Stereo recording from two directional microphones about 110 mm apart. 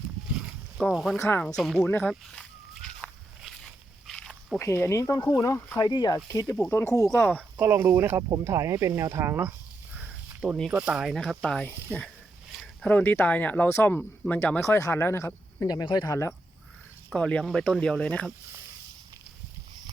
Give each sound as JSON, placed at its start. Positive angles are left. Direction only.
{"t": 0.3, "sound": "a sound", "side_deg": -5}
{"t": 1.2, "sound": "speech", "side_deg": 20}
{"t": 1.5, "sound": "speech", "side_deg": 0}
{"t": 2.0, "sound": "walk", "side_deg": 5}
{"t": 4.5, "sound": "speech", "side_deg": 20}
{"t": 6.7, "sound": "speech", "side_deg": 25}
{"t": 7.3, "sound": "speech", "side_deg": -15}
{"t": 10.0, "sound": "a sound", "side_deg": -10}
{"t": 10.7, "sound": "speech", "side_deg": -10}
{"t": 11.9, "sound": "a sound", "side_deg": 0}
{"t": 12.8, "sound": "speech", "side_deg": 15}
{"t": 15.6, "sound": "speech", "side_deg": 35}
{"t": 17.2, "sound": "speech", "side_deg": 10}